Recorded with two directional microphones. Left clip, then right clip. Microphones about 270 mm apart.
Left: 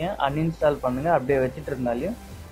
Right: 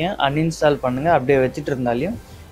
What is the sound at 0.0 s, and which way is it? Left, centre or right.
Speech, right.